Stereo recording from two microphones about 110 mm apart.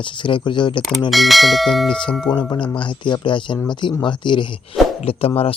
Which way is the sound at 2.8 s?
45° left (ahead or behind).